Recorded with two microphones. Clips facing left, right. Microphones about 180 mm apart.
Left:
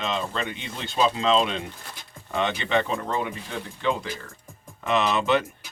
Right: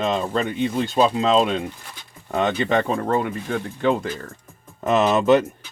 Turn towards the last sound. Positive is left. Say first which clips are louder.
# right 6 dB
turn(degrees=-45)  # may be behind; listen again after turning